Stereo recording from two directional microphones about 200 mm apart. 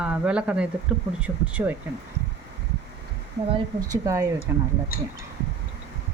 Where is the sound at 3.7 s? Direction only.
15° right (ahead or behind).